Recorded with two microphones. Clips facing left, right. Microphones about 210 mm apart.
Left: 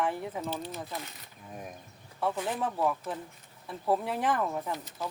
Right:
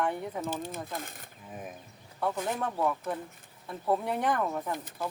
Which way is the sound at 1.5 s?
5° right (ahead or behind).